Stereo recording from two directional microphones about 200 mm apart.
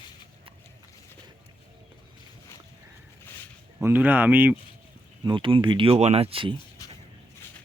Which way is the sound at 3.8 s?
10° right (ahead or behind).